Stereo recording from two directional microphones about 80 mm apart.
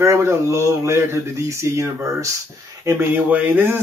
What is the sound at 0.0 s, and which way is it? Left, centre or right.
Speech, right.